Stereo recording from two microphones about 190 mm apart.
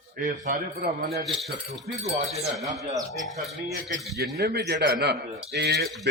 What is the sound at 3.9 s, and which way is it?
Speech, 60° right (ahead or behind).